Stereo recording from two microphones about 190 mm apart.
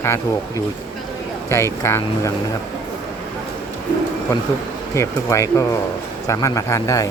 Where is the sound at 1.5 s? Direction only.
15° left (ahead or behind).